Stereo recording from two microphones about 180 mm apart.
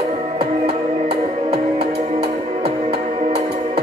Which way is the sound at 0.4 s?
35° right (ahead or behind).